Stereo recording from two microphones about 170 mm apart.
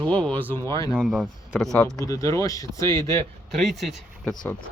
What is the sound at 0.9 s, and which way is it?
Speech, centre (ahead or behind).